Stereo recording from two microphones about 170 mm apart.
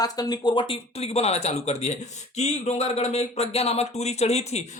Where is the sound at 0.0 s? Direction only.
25° left (ahead or behind).